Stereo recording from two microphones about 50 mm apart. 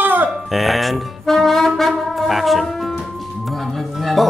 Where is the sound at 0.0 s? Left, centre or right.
Right.